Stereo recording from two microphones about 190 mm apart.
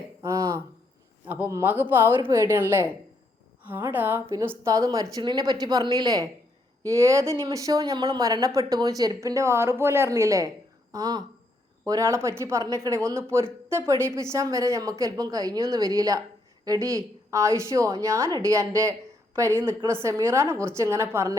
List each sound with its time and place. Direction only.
0.2 s a woman's voice: 15° right (ahead or behind)